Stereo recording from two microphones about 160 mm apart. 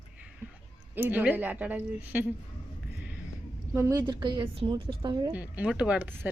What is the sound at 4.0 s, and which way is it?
A woman's voice, 30° right (ahead or behind).